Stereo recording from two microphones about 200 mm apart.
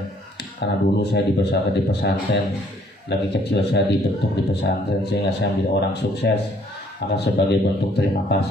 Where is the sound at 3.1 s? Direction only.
60° left (ahead or behind).